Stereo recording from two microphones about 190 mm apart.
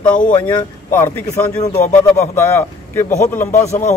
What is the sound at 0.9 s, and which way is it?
Speech, 10° left (ahead or behind).